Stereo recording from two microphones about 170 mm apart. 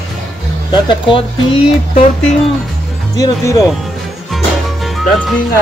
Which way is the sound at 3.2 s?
20° left (ahead or behind).